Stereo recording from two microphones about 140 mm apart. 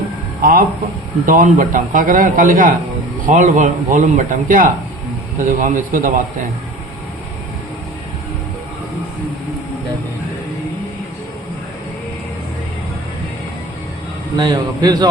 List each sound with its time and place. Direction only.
0.4 s a man's voice: 90° right
1.3 s a man's voice: 75° right (ahead or behind)
3.2 s a man's voice: 70° right (ahead or behind)
14.3 s a man's voice: 30° right (ahead or behind)